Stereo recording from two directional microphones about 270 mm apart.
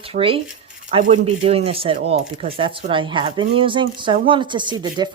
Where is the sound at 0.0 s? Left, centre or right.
Centre.